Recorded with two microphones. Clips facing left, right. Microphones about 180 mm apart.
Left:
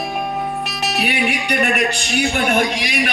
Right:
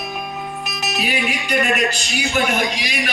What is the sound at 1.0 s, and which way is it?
Music, 65° left (ahead or behind).